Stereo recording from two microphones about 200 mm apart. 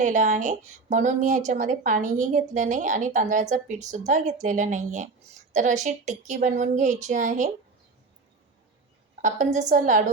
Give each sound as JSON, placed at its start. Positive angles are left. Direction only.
{"t": 0.0, "sound": "speech", "side_deg": -40}
{"t": 9.2, "sound": "speech", "side_deg": -40}